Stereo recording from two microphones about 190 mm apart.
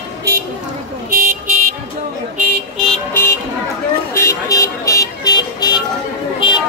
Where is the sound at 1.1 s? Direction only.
45° right (ahead or behind).